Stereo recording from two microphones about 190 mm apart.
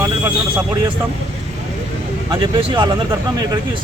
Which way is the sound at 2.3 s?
25° right (ahead or behind).